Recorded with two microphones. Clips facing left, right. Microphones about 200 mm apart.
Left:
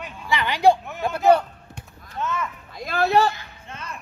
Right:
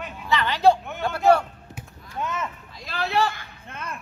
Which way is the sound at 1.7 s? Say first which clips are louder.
Right 1 dB; 15° right (ahead or behind).